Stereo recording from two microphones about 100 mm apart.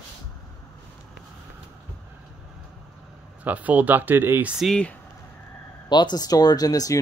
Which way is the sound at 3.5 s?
15° right (ahead or behind).